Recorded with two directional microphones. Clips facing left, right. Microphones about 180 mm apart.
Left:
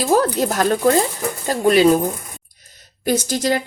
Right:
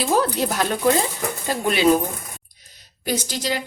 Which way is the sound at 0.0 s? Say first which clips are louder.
Left 4 dB; 45° left (ahead or behind).